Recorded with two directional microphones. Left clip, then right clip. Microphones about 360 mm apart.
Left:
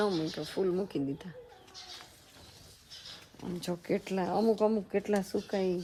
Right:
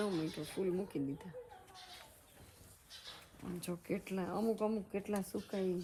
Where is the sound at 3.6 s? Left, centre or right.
Centre.